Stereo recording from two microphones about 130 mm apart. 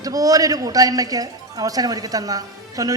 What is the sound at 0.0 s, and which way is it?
A woman's voice, 30° right (ahead or behind).